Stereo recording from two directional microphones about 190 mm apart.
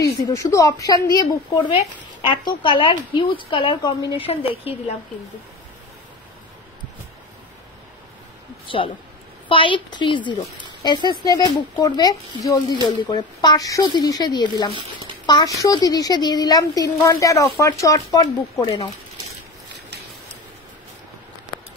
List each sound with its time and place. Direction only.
0.0 s speech: 20° left (ahead or behind)
8.6 s speech: 25° left (ahead or behind)